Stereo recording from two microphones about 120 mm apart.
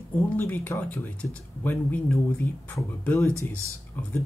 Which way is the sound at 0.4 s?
15° left (ahead or behind).